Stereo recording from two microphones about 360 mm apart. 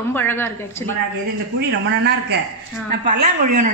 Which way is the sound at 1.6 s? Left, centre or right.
Right.